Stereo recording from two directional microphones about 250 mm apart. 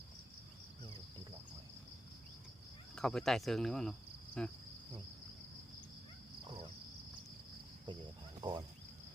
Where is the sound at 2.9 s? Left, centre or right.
Centre.